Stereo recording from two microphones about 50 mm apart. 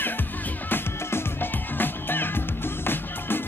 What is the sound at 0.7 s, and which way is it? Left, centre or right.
Music, left.